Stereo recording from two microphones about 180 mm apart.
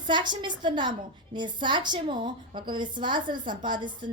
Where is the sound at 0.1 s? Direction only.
25° right (ahead or behind).